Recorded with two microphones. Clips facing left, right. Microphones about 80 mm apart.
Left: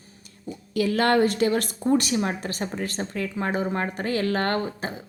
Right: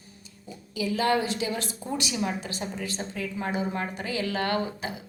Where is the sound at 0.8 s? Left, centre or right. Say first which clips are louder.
Left 5 dB; left.